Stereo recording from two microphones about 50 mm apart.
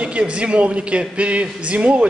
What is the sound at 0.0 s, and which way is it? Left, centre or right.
A man's voice, right.